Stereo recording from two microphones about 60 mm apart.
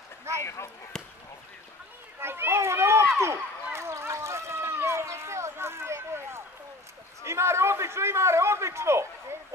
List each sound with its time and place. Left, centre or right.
0.4 s speech: left
0.9 s speech: centre
2.1 s speech: right
3.7 s a sound: right
7.2 s a man's voice: right